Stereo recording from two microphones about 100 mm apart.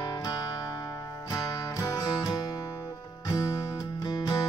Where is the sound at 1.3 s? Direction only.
35° left (ahead or behind).